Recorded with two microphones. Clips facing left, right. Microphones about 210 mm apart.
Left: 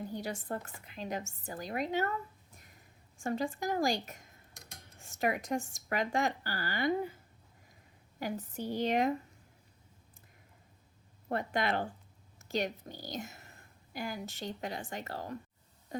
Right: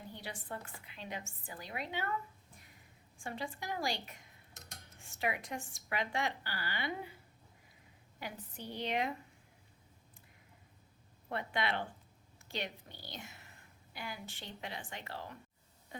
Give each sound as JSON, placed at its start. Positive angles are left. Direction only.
{"t": 0.1, "sound": "speech", "side_deg": 45}
{"t": 3.2, "sound": "speech", "side_deg": 45}
{"t": 8.2, "sound": "speech", "side_deg": 45}
{"t": 11.3, "sound": "a woman's voice", "side_deg": 45}
{"t": 15.9, "sound": "a sound", "side_deg": 40}